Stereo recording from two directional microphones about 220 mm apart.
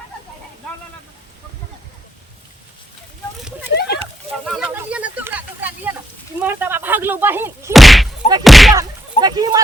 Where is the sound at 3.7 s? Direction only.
45° left (ahead or behind).